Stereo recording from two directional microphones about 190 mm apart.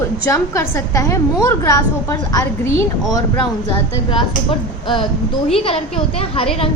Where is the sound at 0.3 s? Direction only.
15° left (ahead or behind).